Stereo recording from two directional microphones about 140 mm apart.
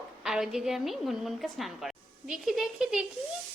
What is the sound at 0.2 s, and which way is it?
A child's voice, 5° right (ahead or behind).